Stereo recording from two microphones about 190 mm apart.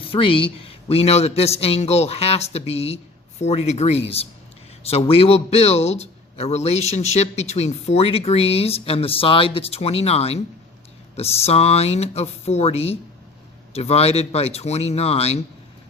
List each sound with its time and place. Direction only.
0.1 s speech: 30° left (ahead or behind)